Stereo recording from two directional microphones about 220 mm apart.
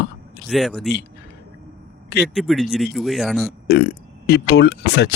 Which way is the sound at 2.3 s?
Centre (ahead or behind).